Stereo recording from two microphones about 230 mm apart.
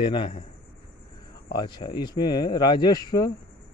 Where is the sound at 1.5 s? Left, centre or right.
Centre.